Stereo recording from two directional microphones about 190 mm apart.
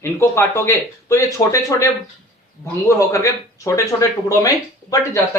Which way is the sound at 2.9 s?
15° left (ahead or behind).